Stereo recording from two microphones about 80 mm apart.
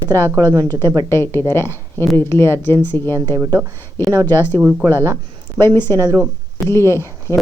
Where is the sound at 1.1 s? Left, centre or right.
Left.